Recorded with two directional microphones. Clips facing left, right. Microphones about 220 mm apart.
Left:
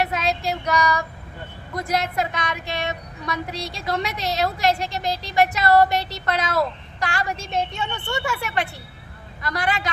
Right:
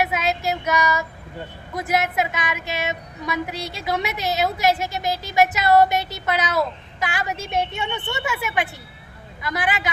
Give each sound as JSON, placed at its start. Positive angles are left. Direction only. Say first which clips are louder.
{"t": 0.0, "sound": "child singing", "louder": "right 1 dB", "side_deg": -5}
{"t": 1.7, "sound": "a woman's voice", "louder": "right 2 dB", "side_deg": -5}
{"t": 5.6, "sound": "speech", "louder": "even", "side_deg": -20}
{"t": 6.1, "sound": "a woman's voice", "louder": "right 1 dB", "side_deg": -5}